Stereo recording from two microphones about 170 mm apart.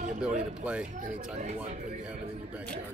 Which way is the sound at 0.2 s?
5° right (ahead or behind).